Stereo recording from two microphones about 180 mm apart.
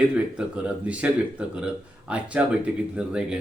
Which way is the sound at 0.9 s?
5° right (ahead or behind).